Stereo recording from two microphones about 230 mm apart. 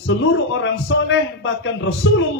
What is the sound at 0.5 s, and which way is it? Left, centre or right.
A man's voice, left.